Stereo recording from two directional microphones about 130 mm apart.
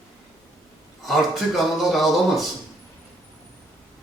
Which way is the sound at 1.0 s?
Centre (ahead or behind).